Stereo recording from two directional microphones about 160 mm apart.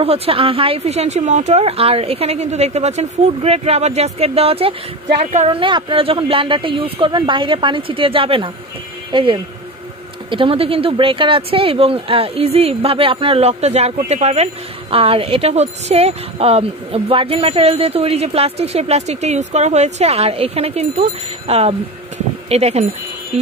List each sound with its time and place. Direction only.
0.0 s speech: 40° right (ahead or behind)
5.2 s a woman's voice: 50° right (ahead or behind)
5.6 s speech: 30° right (ahead or behind)
23.3 s music: 40° right (ahead or behind)